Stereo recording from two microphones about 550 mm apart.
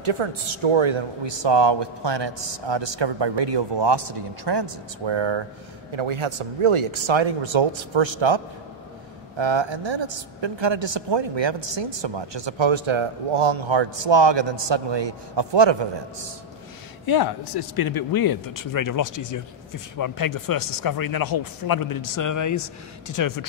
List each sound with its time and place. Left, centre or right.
0.0 s speech: right
9.4 s speech: right
17.0 s speech: left